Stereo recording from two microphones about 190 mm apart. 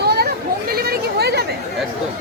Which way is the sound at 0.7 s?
55° right (ahead or behind).